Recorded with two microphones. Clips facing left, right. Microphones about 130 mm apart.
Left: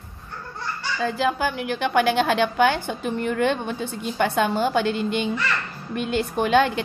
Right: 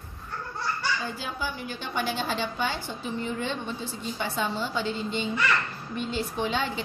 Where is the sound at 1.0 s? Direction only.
90° left.